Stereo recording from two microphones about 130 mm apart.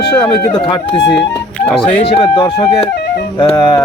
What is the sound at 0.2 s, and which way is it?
Speech, 40° left (ahead or behind).